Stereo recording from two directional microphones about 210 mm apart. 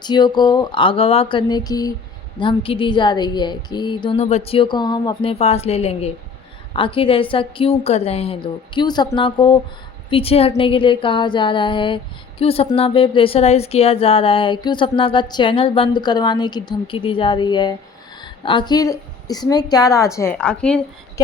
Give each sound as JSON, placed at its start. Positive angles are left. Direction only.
{"t": 0.0, "sound": "a woman's voice", "side_deg": 20}